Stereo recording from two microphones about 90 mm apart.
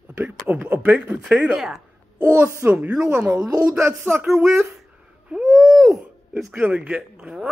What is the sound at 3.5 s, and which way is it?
Speech, 40° right (ahead or behind).